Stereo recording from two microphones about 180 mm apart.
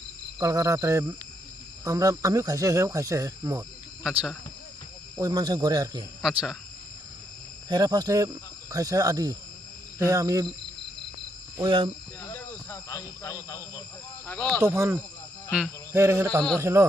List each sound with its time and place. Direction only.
0.3 s speech: 20° right (ahead or behind)
4.0 s speech: 5° right (ahead or behind)
5.2 s speech: 20° right (ahead or behind)
6.2 s speech: centre (ahead or behind)
7.7 s speech: 20° right (ahead or behind)
11.6 s speech: 25° right (ahead or behind)
12.3 s speech: 15° left (ahead or behind)
14.6 s speech: 15° right (ahead or behind)